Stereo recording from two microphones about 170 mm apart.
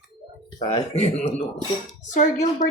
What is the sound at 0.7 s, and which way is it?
A woman's voice, 40° left (ahead or behind).